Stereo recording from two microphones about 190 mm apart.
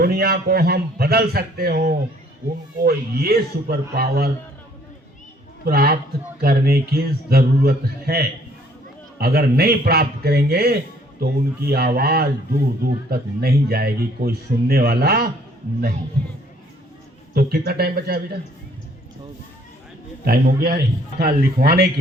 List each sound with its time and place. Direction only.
0.0 s a man's voice: 55° right (ahead or behind)
5.6 s speech: 55° right (ahead or behind)
17.3 s a man's voice: 55° right (ahead or behind)
20.2 s speech: 50° right (ahead or behind)